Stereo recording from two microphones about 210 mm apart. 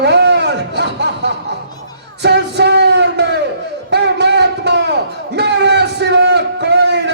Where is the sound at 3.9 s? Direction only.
55° right (ahead or behind).